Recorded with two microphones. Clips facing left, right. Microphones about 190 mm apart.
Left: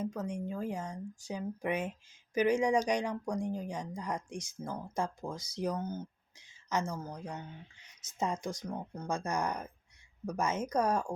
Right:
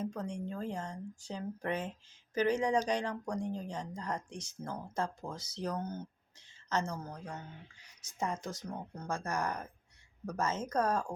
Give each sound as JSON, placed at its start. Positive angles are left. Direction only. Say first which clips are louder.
{"t": 0.0, "sound": "speech", "louder": "left 2 dB", "side_deg": 5}